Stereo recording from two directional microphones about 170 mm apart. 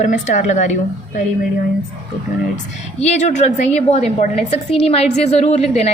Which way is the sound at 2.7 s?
40° left (ahead or behind).